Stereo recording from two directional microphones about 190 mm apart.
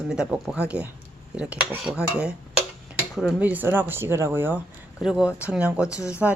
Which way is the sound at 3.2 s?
5° right (ahead or behind).